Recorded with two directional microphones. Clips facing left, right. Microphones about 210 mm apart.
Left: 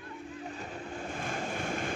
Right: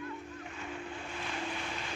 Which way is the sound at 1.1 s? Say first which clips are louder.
Left 4 dB; 45° left (ahead or behind).